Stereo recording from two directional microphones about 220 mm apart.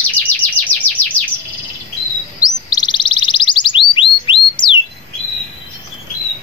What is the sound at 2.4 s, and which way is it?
Chirp, 20° left (ahead or behind).